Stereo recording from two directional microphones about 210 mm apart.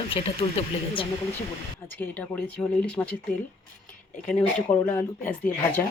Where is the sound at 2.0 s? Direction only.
10° left (ahead or behind).